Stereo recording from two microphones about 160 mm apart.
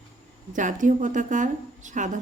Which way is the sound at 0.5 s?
55° right (ahead or behind).